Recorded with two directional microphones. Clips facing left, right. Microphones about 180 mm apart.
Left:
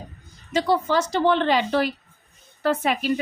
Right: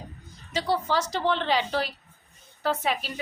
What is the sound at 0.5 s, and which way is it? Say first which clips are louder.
A woman's voice: left 5 dB; 50° left (ahead or behind).